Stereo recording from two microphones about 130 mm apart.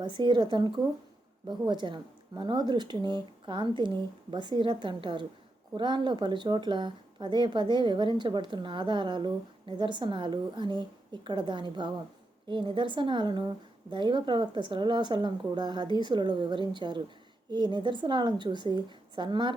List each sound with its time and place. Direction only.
0.0 s speech: 40° right (ahead or behind)